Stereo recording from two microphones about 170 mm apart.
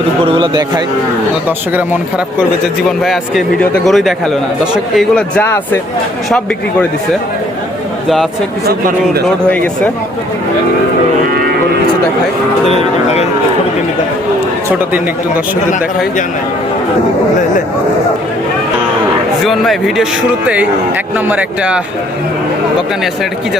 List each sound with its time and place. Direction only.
0.3 s a man's voice: 30° right (ahead or behind)
3.0 s speech: centre (ahead or behind)
5.4 s speech: 10° left (ahead or behind)
8.0 s speech: centre (ahead or behind)
12.6 s speech: 40° left (ahead or behind)
19.5 s speech: centre (ahead or behind)
21.2 s speech: 10° right (ahead or behind)